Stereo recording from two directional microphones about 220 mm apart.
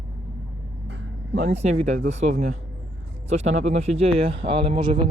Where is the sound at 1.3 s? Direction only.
30° right (ahead or behind).